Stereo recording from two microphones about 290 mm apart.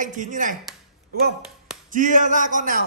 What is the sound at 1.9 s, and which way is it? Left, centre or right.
Speech, right.